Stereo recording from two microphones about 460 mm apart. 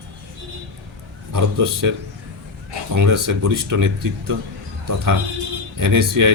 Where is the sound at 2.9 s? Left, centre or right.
Right.